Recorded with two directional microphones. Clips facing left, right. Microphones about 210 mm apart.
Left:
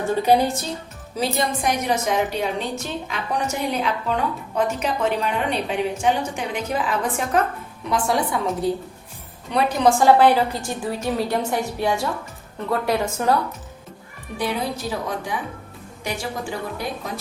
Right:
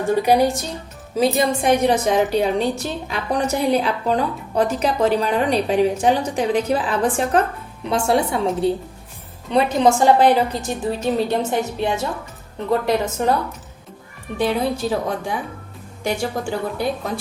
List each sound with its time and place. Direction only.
0.2 s a woman's voice: 15° right (ahead or behind)
1.1 s a woman's voice: 25° right (ahead or behind)
14.3 s a woman's voice: 30° right (ahead or behind)